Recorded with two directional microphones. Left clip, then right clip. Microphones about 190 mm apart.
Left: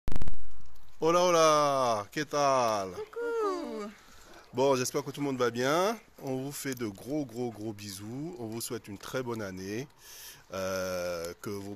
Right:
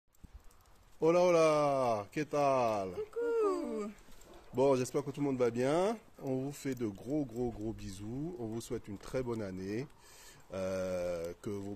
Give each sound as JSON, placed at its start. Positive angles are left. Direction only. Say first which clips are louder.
{"t": 1.0, "sound": "speech", "louder": "left 3 dB", "side_deg": 15}
{"t": 3.2, "sound": "a sound", "louder": "left 1 dB", "side_deg": -10}
{"t": 4.6, "sound": "speech", "louder": "left 3 dB", "side_deg": 15}